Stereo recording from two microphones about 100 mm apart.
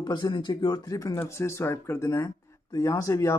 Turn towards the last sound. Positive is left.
turn(degrees=30)  # may be behind; listen again after turning